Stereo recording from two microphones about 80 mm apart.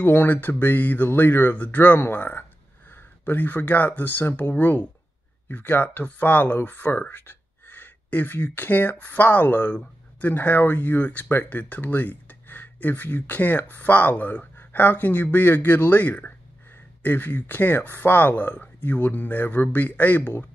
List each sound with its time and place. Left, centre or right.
0.0 s speech: left